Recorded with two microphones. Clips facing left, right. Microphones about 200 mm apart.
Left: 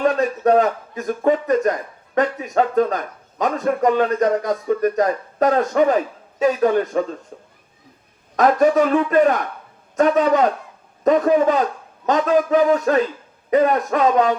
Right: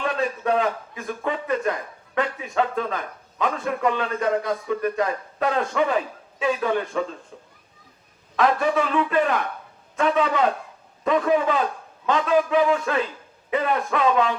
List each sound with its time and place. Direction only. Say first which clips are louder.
0.0 s a man's voice: left 7 dB; 45° left (ahead or behind)
8.4 s a man's voice: left 6 dB; 40° left (ahead or behind)